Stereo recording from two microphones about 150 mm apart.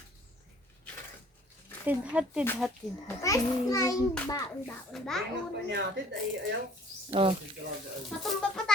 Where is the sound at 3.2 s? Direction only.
20° left (ahead or behind).